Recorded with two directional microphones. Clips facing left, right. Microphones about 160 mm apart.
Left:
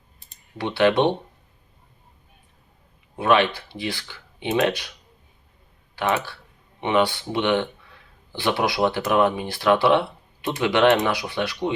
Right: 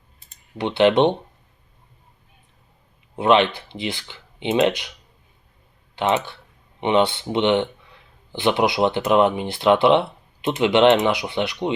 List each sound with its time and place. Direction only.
0.6 s speech: 20° right (ahead or behind)
3.2 s speech: 20° right (ahead or behind)
6.0 s speech: 20° right (ahead or behind)